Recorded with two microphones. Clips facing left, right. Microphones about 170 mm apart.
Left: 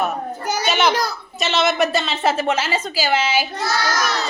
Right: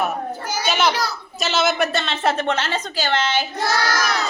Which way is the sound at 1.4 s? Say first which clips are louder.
Left 1 dB; centre (ahead or behind).